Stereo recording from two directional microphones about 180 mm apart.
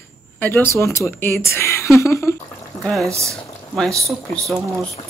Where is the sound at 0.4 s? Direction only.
10° left (ahead or behind).